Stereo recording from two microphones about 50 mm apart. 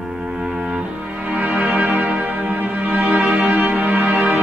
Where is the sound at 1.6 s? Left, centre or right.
Right.